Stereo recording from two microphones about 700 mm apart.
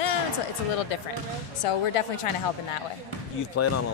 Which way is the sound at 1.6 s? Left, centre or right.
Left.